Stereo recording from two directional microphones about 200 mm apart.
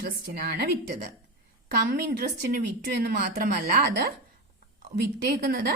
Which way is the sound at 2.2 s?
50° right (ahead or behind).